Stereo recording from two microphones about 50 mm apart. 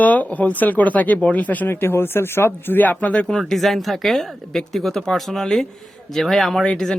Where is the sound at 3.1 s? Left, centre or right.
Left.